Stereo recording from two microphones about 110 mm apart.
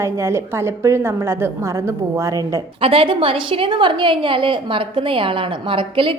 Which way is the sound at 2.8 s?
55° right (ahead or behind).